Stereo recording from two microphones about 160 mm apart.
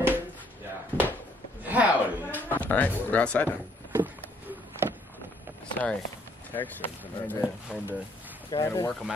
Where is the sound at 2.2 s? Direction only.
10° left (ahead or behind).